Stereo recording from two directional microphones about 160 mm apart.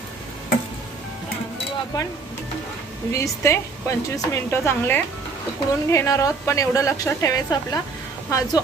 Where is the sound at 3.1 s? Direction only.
20° left (ahead or behind).